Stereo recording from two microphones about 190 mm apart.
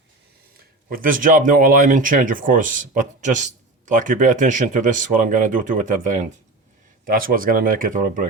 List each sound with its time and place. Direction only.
0.9 s speech: 45° right (ahead or behind)